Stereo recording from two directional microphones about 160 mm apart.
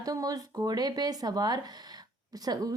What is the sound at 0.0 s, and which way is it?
A woman's voice, 20° right (ahead or behind).